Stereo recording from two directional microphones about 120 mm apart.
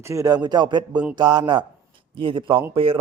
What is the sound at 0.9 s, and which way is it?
Mantra, 10° right (ahead or behind).